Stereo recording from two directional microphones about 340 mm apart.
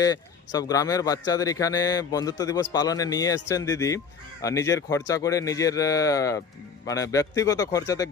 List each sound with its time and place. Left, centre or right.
0.0 s speech: centre